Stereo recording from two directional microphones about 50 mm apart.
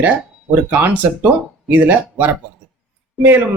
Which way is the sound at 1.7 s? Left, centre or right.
Right.